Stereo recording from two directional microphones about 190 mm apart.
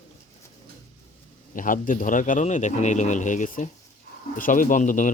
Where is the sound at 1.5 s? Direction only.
45° left (ahead or behind).